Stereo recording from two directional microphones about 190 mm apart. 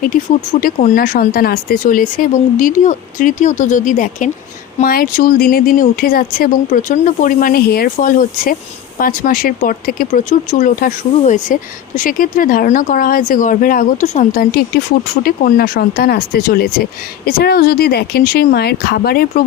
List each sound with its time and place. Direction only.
0.0 s speech: 45° left (ahead or behind)